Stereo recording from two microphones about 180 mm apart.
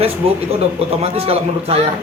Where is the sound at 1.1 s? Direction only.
35° right (ahead or behind).